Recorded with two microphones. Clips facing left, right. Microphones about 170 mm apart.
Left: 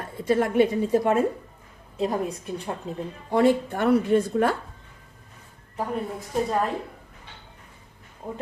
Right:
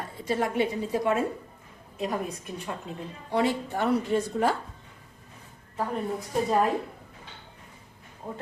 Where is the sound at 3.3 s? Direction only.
50° left (ahead or behind).